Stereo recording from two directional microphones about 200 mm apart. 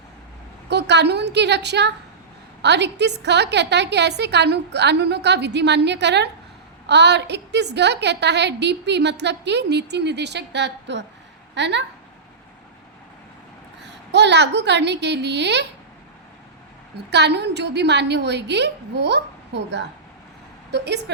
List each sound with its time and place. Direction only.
0.7 s a woman's voice: 60° right (ahead or behind)
13.8 s a woman's voice: 60° right (ahead or behind)
17.1 s a woman's voice: 60° right (ahead or behind)